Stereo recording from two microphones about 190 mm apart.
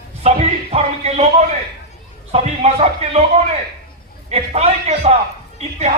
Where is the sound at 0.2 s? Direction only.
35° right (ahead or behind).